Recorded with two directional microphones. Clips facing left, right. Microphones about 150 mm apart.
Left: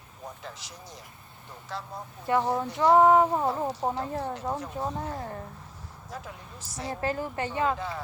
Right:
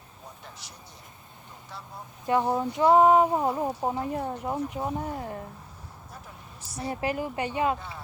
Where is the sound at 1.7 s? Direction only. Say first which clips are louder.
Left 7 dB; 90° left.